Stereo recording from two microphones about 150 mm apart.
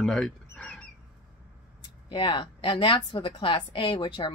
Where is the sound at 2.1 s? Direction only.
30° left (ahead or behind).